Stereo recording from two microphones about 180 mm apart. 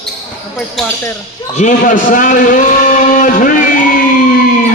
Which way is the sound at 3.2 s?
45° left (ahead or behind).